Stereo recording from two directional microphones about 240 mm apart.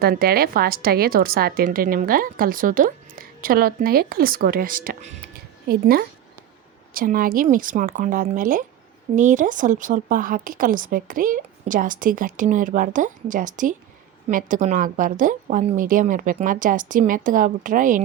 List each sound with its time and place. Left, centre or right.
0.0 s a woman's voice: right
5.6 s a woman's voice: right